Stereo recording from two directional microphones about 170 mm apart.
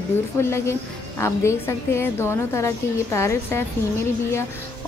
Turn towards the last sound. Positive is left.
turn(degrees=15)  # may be behind; listen again after turning